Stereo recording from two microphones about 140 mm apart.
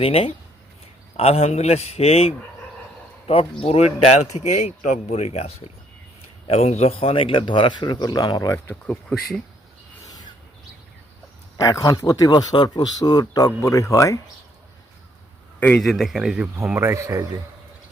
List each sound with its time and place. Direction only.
0.0 s speech: 45° left (ahead or behind)
3.6 s speech: 45° left (ahead or behind)
4.4 s speech: 60° left (ahead or behind); by 9.2 s 10° left (ahead or behind)
11.5 s a man's voice: 25° left (ahead or behind)
15.8 s speech: centre (ahead or behind)
16.6 s speech: 15° right (ahead or behind)